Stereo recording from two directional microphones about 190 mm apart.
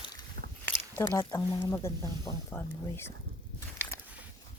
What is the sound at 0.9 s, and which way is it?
Speech, 15° left (ahead or behind).